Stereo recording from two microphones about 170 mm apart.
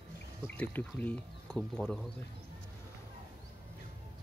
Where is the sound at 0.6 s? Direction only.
10° left (ahead or behind).